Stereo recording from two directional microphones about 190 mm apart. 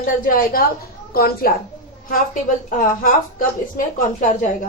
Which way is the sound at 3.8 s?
45° left (ahead or behind).